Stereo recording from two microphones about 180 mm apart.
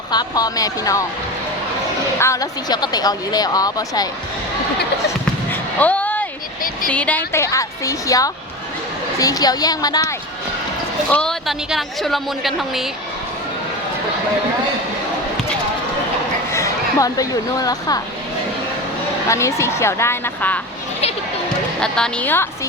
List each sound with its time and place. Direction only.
0.1 s speech: 20° left (ahead or behind)
2.1 s speech: 15° left (ahead or behind)
5.5 s a sound: 10° left (ahead or behind)
6.8 s a woman's voice: 5° left (ahead or behind)
11.1 s speech: 5° left (ahead or behind)
16.5 s speech: 15° left (ahead or behind)
19.3 s a woman's voice: 15° left (ahead or behind)
21.8 s speech: 5° left (ahead or behind)